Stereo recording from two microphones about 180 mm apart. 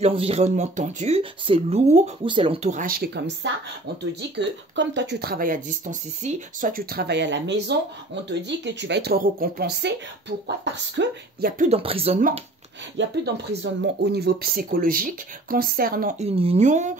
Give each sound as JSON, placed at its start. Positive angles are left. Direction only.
{"t": 0.0, "sound": "speech", "side_deg": -35}
{"t": 2.7, "sound": "speech", "side_deg": -50}
{"t": 11.5, "sound": "speech", "side_deg": -40}
{"t": 12.9, "sound": "speech", "side_deg": -65}
{"t": 16.2, "sound": "speech", "side_deg": -35}